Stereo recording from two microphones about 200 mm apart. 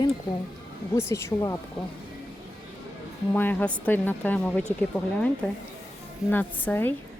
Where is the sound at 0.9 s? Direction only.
15° left (ahead or behind).